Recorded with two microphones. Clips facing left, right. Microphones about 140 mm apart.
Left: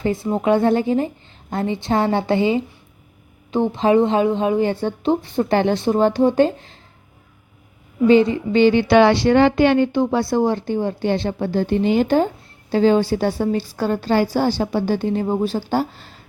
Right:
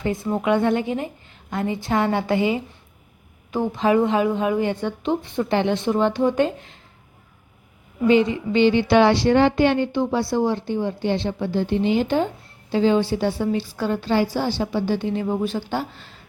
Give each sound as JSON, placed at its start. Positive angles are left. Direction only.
{"t": 0.0, "sound": "a woman's voice", "side_deg": 30}
{"t": 8.0, "sound": "a woman's voice", "side_deg": 35}
{"t": 9.0, "sound": "a woman's voice", "side_deg": 75}